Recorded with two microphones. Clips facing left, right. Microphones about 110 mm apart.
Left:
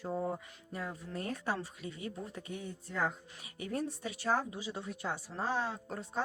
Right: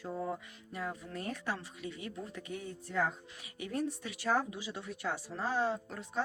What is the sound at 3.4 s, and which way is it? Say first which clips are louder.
Speech: right 1 dB; 35° left (ahead or behind).